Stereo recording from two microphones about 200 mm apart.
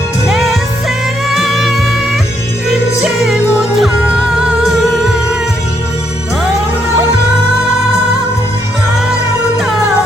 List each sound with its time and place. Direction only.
0.3 s music: centre (ahead or behind)
3.0 s music: 5° right (ahead or behind)